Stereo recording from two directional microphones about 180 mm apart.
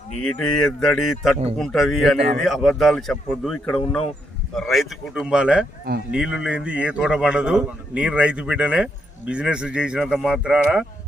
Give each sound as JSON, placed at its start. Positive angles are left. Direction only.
{"t": 0.2, "sound": "speech", "side_deg": 5}
{"t": 2.1, "sound": "speech", "side_deg": -40}
{"t": 2.4, "sound": "speech", "side_deg": 0}
{"t": 5.9, "sound": "speech", "side_deg": -60}
{"t": 6.3, "sound": "speech", "side_deg": -5}